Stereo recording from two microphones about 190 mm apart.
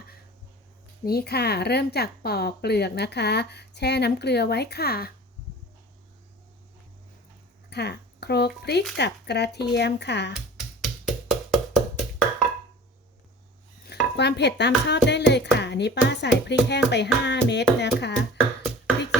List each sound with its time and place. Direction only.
1.0 s a woman's voice: 55° left (ahead or behind)
7.7 s a woman's voice: 60° left (ahead or behind)
10.8 s wood block: centre (ahead or behind)
13.8 s a woman's voice: 60° left (ahead or behind)